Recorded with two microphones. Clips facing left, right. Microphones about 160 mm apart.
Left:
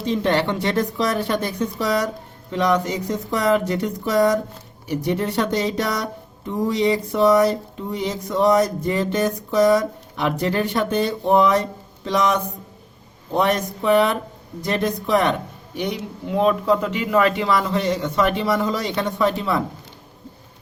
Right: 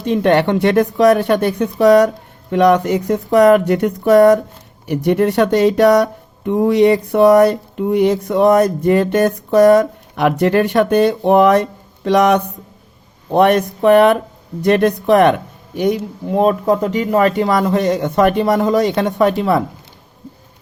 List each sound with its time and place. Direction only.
0.0 s speech: 60° right (ahead or behind)